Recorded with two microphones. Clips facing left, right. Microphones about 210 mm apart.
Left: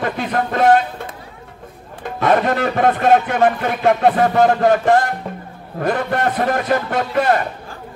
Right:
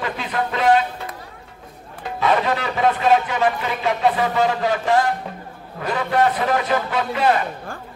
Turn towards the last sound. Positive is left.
turn(degrees=50)  # may be behind; listen again after turning